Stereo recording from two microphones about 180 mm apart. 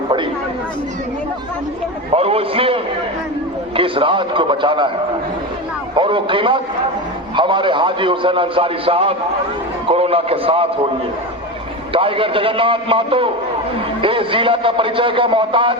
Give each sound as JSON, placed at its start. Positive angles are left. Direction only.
{"t": 2.1, "sound": "a man's voice", "side_deg": -35}
{"t": 6.0, "sound": "a man's voice", "side_deg": -30}
{"t": 11.9, "sound": "a man's voice", "side_deg": -30}